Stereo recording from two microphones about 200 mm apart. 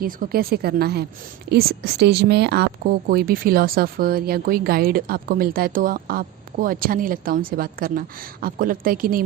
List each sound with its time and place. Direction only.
0.0 s speech: 45° right (ahead or behind)